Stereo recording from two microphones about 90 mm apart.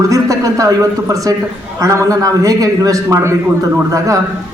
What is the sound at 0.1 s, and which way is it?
A man's voice, 40° right (ahead or behind).